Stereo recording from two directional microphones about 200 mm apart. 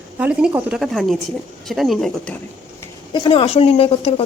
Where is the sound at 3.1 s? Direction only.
25° left (ahead or behind).